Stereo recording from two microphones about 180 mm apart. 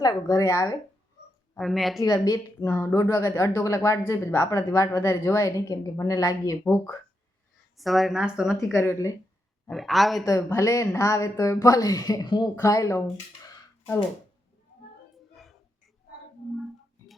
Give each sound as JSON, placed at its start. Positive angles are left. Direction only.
{"t": 0.0, "sound": "speech", "side_deg": 20}
{"t": 1.5, "sound": "speech", "side_deg": 0}
{"t": 2.0, "sound": "speech", "side_deg": 20}
{"t": 7.8, "sound": "speech", "side_deg": 0}
{"t": 8.7, "sound": "speech", "side_deg": 15}
{"t": 9.6, "sound": "speech", "side_deg": 0}
{"t": 10.2, "sound": "speech", "side_deg": 15}